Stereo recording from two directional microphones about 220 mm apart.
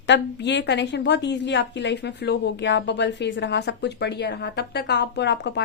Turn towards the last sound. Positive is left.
turn(degrees=50)  # may be behind; listen again after turning